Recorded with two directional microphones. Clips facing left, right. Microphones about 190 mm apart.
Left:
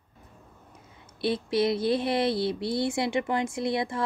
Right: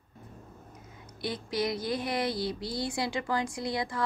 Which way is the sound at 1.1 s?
25° left (ahead or behind).